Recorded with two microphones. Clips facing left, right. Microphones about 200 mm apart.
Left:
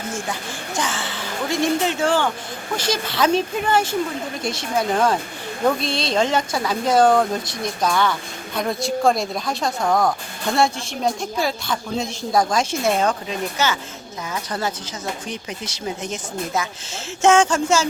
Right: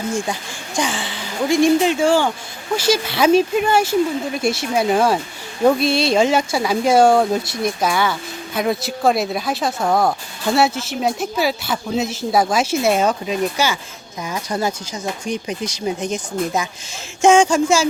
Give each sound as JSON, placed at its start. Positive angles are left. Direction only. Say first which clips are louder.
{"t": 0.1, "sound": "a woman's voice", "louder": "right 4 dB", "side_deg": -15}